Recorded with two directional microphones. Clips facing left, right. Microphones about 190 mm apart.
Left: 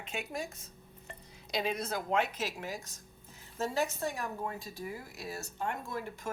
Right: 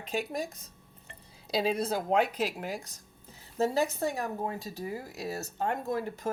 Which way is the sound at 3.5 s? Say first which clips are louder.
Right 5 dB; 35° right (ahead or behind).